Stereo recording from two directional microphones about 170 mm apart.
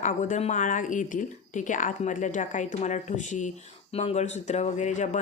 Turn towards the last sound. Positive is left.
turn(degrees=45)  # may be behind; listen again after turning